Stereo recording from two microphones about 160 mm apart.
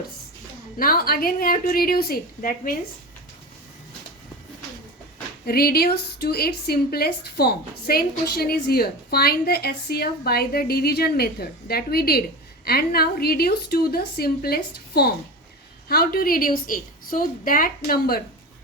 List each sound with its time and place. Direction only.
0.8 s a woman's voice: 65° left (ahead or behind)
5.5 s a woman's voice: 75° left (ahead or behind)